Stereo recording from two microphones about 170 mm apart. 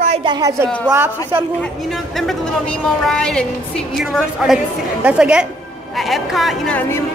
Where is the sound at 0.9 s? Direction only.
15° right (ahead or behind).